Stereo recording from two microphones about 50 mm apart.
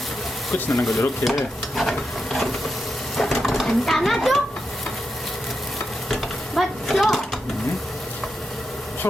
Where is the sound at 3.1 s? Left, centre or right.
Centre.